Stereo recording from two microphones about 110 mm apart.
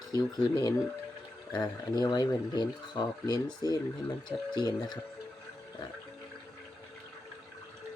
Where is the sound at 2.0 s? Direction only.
40° left (ahead or behind).